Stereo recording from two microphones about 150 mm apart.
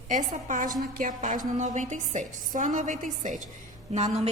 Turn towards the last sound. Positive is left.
turn(degrees=-50)  # may be behind; listen again after turning